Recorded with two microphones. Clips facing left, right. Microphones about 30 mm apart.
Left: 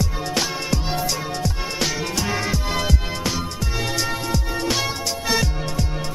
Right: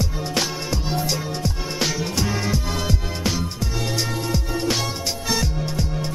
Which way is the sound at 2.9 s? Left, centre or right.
Centre.